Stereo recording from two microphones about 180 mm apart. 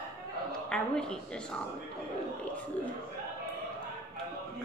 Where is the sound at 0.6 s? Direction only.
5° left (ahead or behind).